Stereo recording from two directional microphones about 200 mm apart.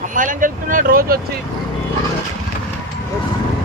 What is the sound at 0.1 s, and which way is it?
Speech, 40° right (ahead or behind).